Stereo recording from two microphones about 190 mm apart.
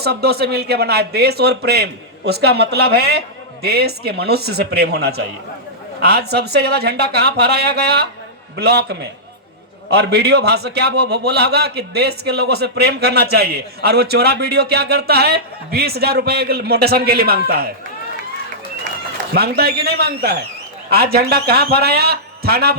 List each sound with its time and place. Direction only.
0.0 s a man's voice: 55° right (ahead or behind)
19.3 s a man's voice: 55° right (ahead or behind)